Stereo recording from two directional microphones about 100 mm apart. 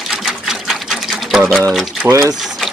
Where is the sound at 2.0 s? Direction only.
30° right (ahead or behind).